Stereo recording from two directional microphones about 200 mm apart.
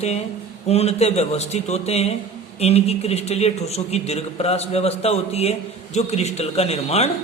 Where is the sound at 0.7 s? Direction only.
30° left (ahead or behind).